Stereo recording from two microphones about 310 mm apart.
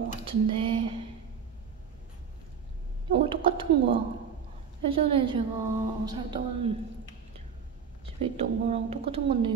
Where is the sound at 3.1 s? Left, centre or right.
Centre.